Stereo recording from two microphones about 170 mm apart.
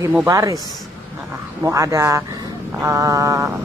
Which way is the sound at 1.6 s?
15° right (ahead or behind).